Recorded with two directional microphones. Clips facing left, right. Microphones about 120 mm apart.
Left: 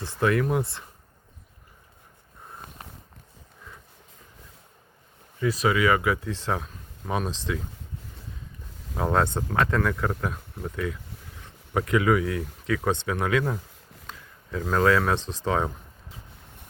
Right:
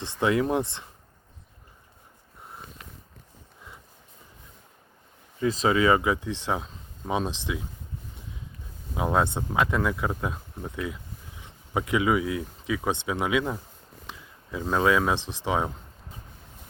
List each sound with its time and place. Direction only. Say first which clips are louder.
0.2 s speech: even; 20° right (ahead or behind)
2.8 s a sound: left 3 dB; 35° left (ahead or behind)
5.4 s speech: right 1 dB; 25° right (ahead or behind)
9.0 s speech: left 1 dB; 10° right (ahead or behind)